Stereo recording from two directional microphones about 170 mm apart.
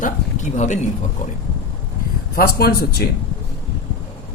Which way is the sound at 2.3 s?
65° left (ahead or behind).